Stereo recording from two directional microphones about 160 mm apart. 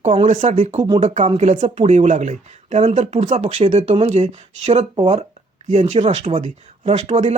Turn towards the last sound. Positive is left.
turn(degrees=-45)  # may be behind; listen again after turning